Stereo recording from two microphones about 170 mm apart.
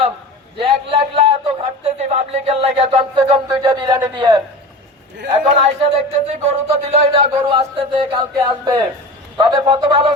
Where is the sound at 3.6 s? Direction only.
25° right (ahead or behind).